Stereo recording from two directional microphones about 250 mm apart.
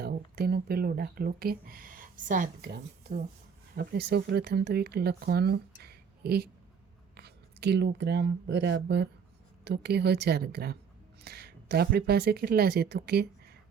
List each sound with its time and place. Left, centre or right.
0.0 s speech: right